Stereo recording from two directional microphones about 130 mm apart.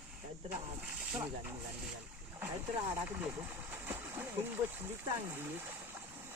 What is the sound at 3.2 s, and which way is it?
Speech, 15° right (ahead or behind).